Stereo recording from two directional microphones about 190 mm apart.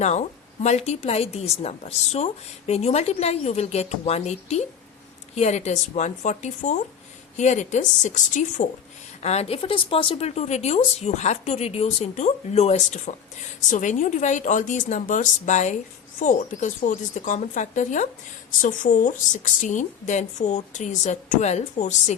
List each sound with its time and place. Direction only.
0.0 s a woman's voice: 35° left (ahead or behind)